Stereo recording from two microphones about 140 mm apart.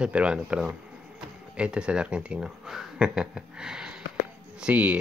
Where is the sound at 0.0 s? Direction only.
10° right (ahead or behind).